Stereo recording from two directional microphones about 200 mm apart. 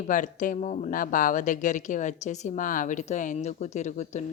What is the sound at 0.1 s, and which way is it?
A woman's voice, 40° left (ahead or behind).